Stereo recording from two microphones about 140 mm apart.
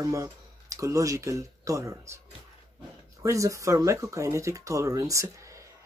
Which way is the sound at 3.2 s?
20° right (ahead or behind).